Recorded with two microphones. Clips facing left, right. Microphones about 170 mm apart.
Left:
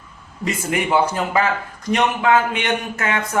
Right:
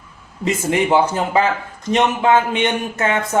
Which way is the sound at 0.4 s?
25° right (ahead or behind).